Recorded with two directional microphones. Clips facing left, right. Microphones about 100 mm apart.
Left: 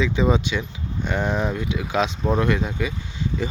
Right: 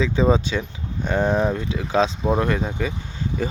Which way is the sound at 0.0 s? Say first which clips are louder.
Right 2 dB; 35° right (ahead or behind).